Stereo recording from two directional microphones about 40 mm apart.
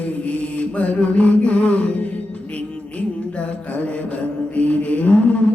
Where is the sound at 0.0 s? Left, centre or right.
Left.